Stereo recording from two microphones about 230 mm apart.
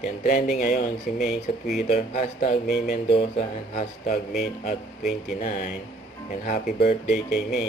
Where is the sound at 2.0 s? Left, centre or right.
Left.